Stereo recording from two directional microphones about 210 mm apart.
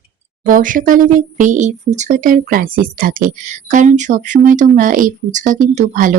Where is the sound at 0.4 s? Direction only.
40° right (ahead or behind).